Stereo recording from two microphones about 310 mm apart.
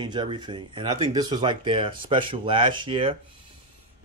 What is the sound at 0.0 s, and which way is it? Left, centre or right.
Speech, centre.